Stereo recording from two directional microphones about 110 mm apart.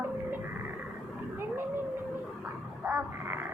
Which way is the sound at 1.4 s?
20° right (ahead or behind).